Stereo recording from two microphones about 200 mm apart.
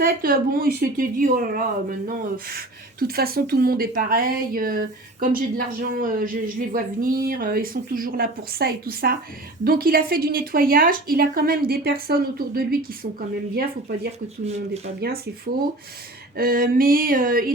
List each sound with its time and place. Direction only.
0.0 s a woman's voice: 45° right (ahead or behind)
16.4 s a woman's voice: 45° right (ahead or behind)